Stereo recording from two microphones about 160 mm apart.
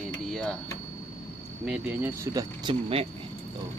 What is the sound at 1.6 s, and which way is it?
Speech, 5° right (ahead or behind).